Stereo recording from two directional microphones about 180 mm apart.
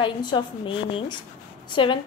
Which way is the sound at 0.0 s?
25° left (ahead or behind).